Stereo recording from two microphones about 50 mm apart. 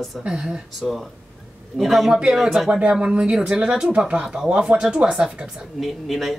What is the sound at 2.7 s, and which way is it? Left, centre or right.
Speech, centre.